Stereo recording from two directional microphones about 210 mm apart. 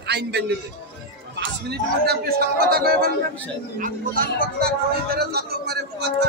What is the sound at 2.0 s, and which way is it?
A man's voice, 50° right (ahead or behind).